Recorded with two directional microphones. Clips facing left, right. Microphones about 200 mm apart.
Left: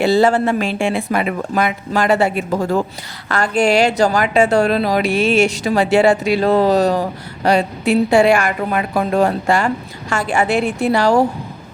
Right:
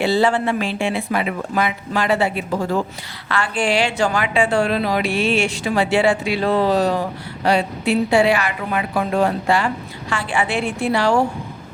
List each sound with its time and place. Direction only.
0.0 s a woman's voice: 45° left (ahead or behind)